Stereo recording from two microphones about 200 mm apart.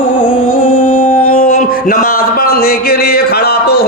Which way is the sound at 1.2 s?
45° left (ahead or behind).